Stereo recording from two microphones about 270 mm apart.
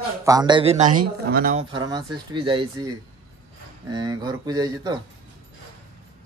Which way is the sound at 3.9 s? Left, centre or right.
Centre.